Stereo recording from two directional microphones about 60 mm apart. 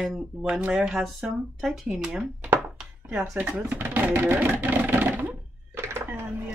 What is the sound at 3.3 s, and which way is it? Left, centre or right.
Speech, right.